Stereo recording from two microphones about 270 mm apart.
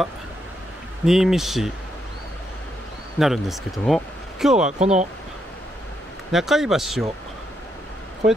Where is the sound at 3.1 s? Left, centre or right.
Centre.